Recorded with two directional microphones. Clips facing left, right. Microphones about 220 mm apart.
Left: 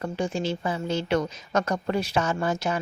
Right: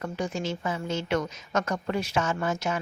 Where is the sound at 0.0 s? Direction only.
30° left (ahead or behind).